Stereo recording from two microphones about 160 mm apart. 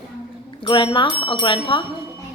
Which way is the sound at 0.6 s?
30° left (ahead or behind).